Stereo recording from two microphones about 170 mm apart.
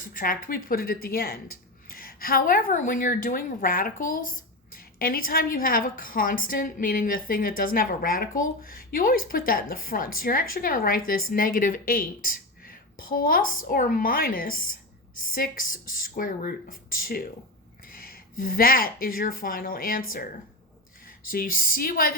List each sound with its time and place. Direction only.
0.1 s speech: 55° left (ahead or behind)